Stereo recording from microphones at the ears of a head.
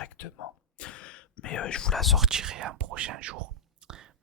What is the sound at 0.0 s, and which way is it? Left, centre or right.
Whispering, left.